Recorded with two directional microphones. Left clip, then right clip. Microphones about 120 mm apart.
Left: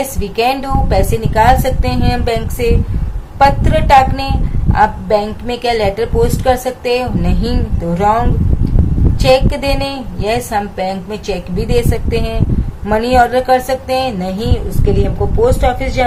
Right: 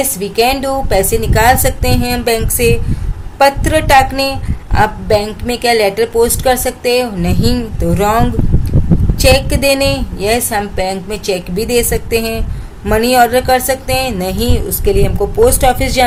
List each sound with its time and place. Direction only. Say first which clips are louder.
0.2 s a woman's voice: right 2 dB; 40° right (ahead or behind); by 16.0 s 70° right (ahead or behind)